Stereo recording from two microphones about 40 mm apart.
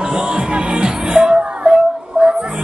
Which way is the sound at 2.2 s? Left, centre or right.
Right.